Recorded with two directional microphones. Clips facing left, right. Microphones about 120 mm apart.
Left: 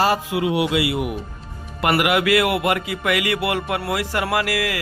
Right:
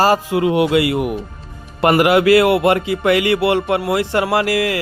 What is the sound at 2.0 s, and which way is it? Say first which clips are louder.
Speech: right 7 dB; 30° right (ahead or behind).